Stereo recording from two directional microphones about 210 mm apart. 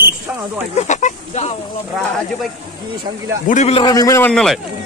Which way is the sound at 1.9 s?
Centre (ahead or behind).